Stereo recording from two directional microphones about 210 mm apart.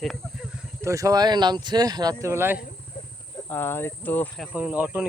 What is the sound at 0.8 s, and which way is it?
Speech, 15° right (ahead or behind).